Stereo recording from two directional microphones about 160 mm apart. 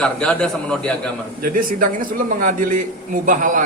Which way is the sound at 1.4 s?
60° right (ahead or behind).